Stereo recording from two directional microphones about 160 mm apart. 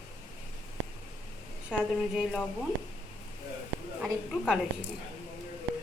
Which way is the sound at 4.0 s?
5° right (ahead or behind).